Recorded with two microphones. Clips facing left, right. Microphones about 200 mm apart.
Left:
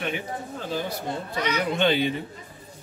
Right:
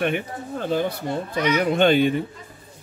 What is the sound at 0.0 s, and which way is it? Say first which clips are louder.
Speech: right 6 dB; 55° right (ahead or behind).